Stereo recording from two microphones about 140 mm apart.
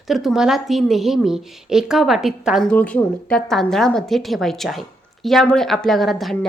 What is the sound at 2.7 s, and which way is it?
Speech, 10° left (ahead or behind).